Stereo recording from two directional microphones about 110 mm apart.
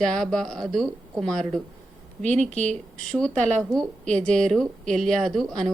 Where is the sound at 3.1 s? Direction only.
10° left (ahead or behind).